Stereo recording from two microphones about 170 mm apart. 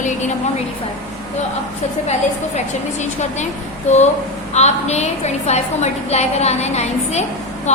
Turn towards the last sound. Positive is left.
turn(degrees=40)  # may be behind; listen again after turning